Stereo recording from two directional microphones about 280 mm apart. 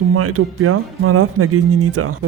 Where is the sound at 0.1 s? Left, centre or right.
Right.